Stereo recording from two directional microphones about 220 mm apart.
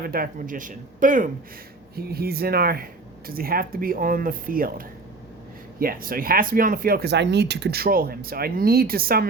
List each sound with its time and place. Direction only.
0.0 s speech: 40° right (ahead or behind)
5.8 s speech: 40° right (ahead or behind)